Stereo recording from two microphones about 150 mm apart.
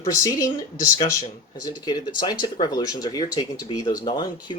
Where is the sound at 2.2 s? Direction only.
30° left (ahead or behind).